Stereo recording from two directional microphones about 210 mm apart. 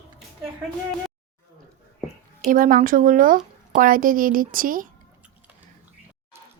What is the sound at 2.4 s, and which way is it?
Speech, 40° right (ahead or behind).